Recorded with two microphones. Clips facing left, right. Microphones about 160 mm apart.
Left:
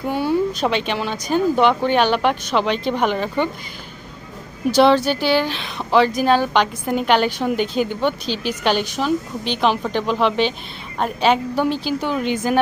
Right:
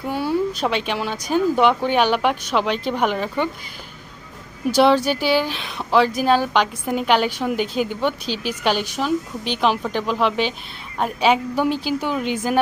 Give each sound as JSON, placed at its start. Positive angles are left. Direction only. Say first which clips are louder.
{"t": 0.0, "sound": "speech", "louder": "left 2 dB", "side_deg": -5}
{"t": 4.7, "sound": "speech", "louder": "left 1 dB", "side_deg": -10}